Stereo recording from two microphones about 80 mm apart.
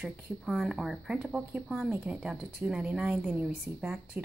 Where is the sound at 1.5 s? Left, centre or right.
Centre.